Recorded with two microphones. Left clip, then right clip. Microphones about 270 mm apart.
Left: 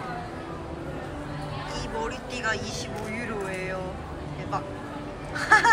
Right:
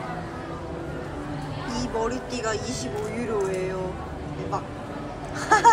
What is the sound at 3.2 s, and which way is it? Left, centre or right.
Music, centre.